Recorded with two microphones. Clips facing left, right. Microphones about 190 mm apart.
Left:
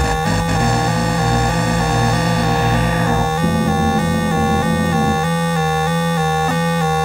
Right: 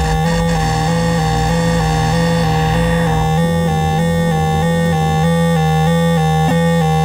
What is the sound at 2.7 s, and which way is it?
Music, 15° right (ahead or behind).